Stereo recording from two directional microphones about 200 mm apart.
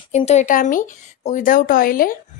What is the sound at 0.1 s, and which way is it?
A woman's voice, 30° left (ahead or behind).